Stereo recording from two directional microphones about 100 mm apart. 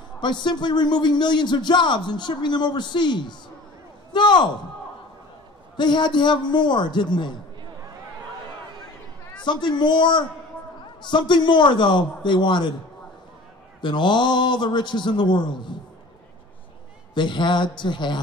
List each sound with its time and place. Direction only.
0.2 s a man's voice: 50° left (ahead or behind)
5.8 s a man's voice: 50° left (ahead or behind)
9.4 s a man's voice: 50° left (ahead or behind)
13.7 s a man's voice: 50° left (ahead or behind)
17.1 s a man's voice: 50° left (ahead or behind)